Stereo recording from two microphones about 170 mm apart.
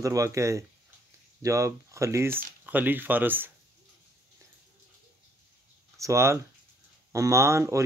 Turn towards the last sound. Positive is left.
turn(degrees=-15)  # may be behind; listen again after turning